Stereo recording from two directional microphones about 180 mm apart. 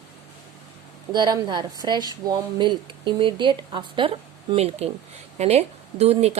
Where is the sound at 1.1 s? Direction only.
25° right (ahead or behind).